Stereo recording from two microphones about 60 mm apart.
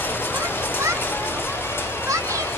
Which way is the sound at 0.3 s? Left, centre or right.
Left.